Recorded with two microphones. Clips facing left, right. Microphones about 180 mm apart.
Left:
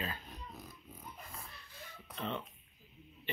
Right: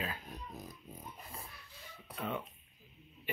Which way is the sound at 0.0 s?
5° right (ahead or behind).